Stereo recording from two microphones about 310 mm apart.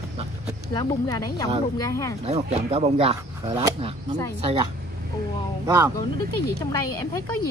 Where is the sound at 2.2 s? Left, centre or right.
Centre.